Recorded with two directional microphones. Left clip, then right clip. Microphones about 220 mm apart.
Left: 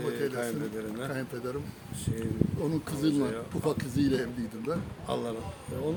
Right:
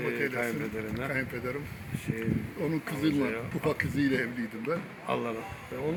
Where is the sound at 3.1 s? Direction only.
Centre (ahead or behind).